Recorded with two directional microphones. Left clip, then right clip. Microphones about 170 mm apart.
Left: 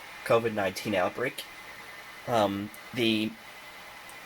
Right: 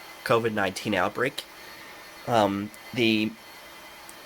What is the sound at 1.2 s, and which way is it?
Speech, 60° right (ahead or behind).